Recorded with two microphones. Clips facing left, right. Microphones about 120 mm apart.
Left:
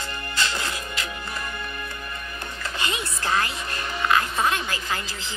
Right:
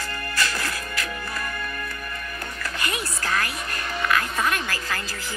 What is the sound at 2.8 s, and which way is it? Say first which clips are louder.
Music: left 1 dB; 25° left (ahead or behind).